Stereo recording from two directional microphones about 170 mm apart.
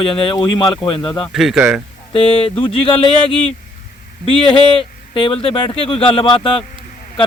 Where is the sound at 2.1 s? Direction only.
30° left (ahead or behind).